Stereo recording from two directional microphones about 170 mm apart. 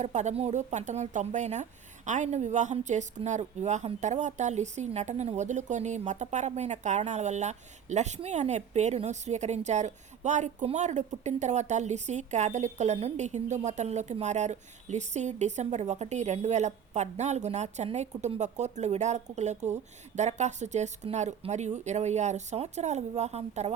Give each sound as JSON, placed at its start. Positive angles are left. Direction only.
{"t": 0.0, "sound": "a woman's voice", "side_deg": -45}